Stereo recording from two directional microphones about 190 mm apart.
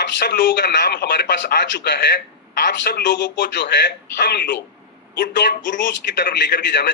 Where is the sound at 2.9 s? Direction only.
65° left (ahead or behind).